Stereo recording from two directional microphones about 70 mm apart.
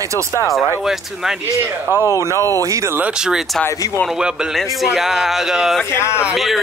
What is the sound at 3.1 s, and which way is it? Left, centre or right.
Speech, centre.